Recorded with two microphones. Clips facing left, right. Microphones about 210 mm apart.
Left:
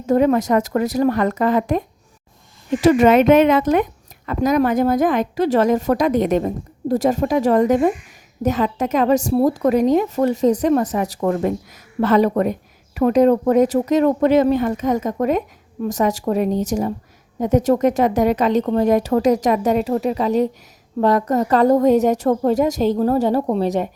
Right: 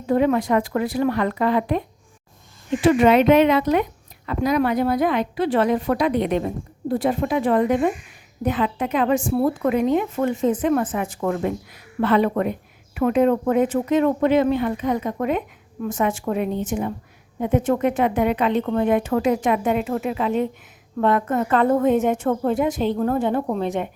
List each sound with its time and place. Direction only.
0.0 s a woman's voice: 45° left (ahead or behind)
2.8 s a woman's voice: 45° left (ahead or behind)